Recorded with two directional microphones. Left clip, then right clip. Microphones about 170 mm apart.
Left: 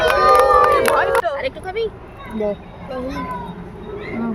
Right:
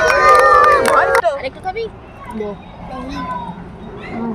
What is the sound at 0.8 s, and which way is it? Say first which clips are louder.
Music: right 3 dB; 20° right (ahead or behind).